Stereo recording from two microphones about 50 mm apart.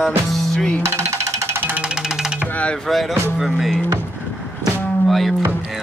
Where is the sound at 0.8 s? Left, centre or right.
Right.